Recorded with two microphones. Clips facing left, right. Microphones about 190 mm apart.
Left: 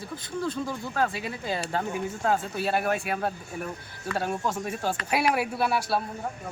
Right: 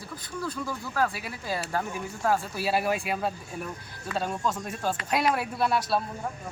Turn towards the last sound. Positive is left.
turn(degrees=5)  # may be behind; listen again after turning